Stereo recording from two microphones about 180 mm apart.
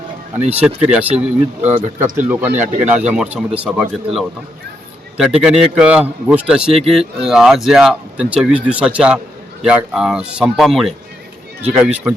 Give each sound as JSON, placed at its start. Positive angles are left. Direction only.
{"t": 0.6, "sound": "speech", "side_deg": -5}